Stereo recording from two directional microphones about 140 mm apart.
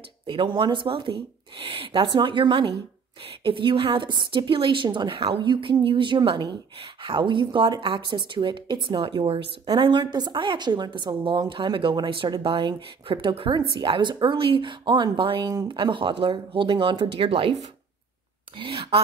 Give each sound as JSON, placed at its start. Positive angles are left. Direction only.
{"t": 0.3, "sound": "a woman's voice", "side_deg": -35}